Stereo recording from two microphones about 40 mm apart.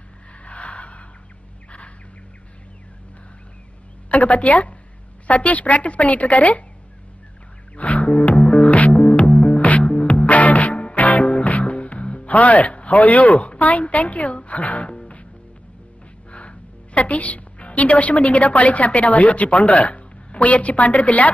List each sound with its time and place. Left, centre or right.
0.5 s gasp: left
4.1 s a woman's voice: left
7.7 s music: left
9.6 s music: left
11.2 s music: left
11.5 s speech: left
14.9 s music: left
16.3 s a woman's voice: left